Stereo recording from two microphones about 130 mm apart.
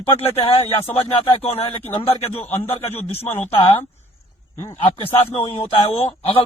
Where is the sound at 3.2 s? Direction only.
15° left (ahead or behind).